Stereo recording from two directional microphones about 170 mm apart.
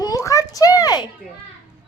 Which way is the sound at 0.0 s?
20° left (ahead or behind).